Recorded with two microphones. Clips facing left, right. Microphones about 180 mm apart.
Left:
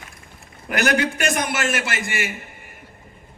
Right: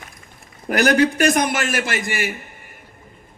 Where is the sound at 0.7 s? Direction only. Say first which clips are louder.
Right 5 dB; 40° right (ahead or behind).